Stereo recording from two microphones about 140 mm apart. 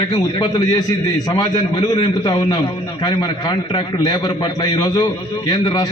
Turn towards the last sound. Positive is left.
turn(degrees=30)  # may be behind; listen again after turning